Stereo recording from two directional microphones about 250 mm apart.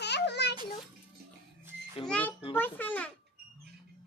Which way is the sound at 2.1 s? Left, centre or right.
Centre.